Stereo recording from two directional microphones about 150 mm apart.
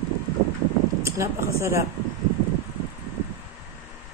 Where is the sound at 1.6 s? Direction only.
20° right (ahead or behind).